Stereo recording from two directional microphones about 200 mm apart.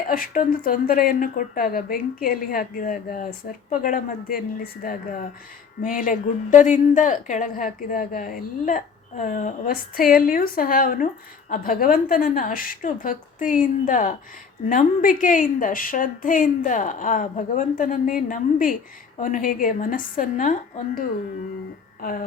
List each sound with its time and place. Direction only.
0.1 s a woman's voice: 45° left (ahead or behind)